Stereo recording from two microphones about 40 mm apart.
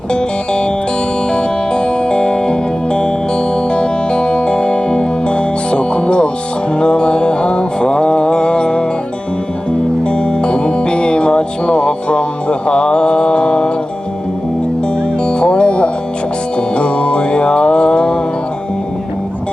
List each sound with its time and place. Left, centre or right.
0.1 s music: left
6.7 s mantra: left
10.1 s music: left
15.3 s music: left